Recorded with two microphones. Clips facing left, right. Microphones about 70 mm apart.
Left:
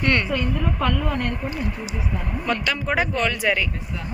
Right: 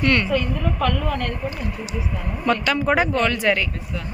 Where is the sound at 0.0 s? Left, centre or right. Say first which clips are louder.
Right 2 dB; left.